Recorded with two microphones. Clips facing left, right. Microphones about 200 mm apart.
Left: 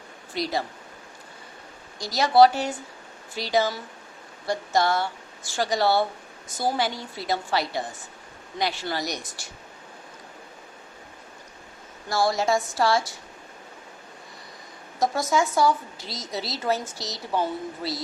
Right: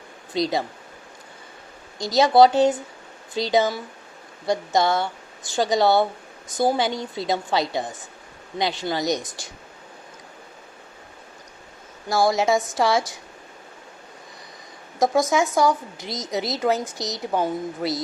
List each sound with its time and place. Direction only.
0.3 s a woman's voice: 20° right (ahead or behind)
2.1 s a woman's voice: 20° right (ahead or behind)
12.0 s a woman's voice: 20° right (ahead or behind)
15.1 s a woman's voice: 20° right (ahead or behind)